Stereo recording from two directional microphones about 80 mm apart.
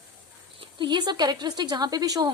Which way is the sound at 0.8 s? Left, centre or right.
Right.